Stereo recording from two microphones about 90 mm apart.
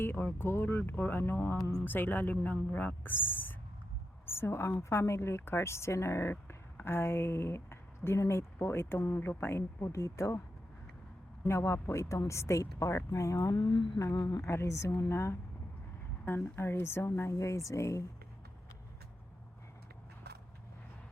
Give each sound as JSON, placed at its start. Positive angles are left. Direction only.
{"t": 0.0, "sound": "speech", "side_deg": 25}
{"t": 1.5, "sound": "speech", "side_deg": 35}
{"t": 1.8, "sound": "speech", "side_deg": 20}
{"t": 11.4, "sound": "speech", "side_deg": 30}
{"t": 13.7, "sound": "humming", "side_deg": 60}
{"t": 14.0, "sound": "speech", "side_deg": 45}
{"t": 14.4, "sound": "speech", "side_deg": 30}